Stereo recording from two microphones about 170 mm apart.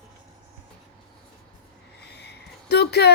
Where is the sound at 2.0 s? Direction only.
75° left (ahead or behind).